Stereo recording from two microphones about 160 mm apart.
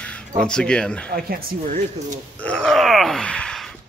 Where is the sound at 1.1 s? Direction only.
60° right (ahead or behind).